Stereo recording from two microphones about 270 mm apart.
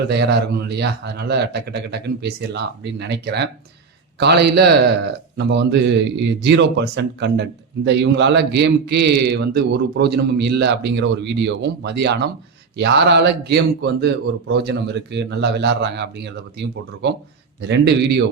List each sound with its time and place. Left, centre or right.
0.1 s a man's voice: right